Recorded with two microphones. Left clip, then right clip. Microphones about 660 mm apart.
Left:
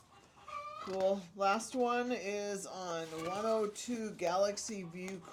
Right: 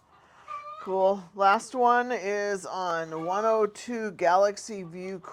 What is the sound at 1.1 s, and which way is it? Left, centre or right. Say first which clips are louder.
Speech: right 10 dB; right.